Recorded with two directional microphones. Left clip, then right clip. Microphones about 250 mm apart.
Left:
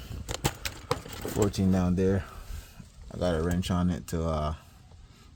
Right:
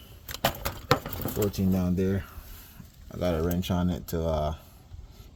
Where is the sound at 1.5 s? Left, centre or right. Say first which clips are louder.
Left 1 dB; left.